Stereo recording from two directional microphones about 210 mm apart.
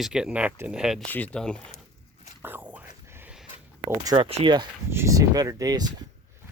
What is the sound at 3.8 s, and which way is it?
Speech, 20° right (ahead or behind).